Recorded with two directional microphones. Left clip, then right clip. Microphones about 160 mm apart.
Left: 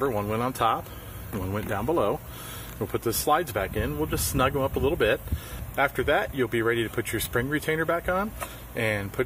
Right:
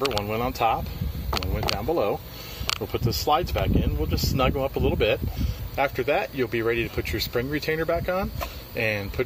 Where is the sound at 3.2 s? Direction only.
10° left (ahead or behind).